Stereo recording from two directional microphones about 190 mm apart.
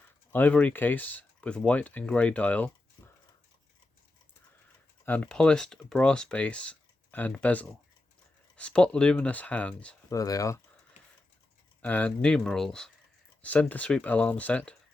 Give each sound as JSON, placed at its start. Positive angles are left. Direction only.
{"t": 0.3, "sound": "speech", "side_deg": 10}
{"t": 5.0, "sound": "speech", "side_deg": 5}
{"t": 10.1, "sound": "speech", "side_deg": 15}
{"t": 11.8, "sound": "speech", "side_deg": 10}